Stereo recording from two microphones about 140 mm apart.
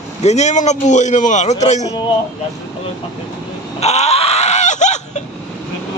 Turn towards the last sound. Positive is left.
turn(degrees=60)  # may be behind; listen again after turning